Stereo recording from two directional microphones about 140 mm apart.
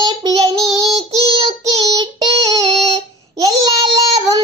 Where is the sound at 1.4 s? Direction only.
25° right (ahead or behind).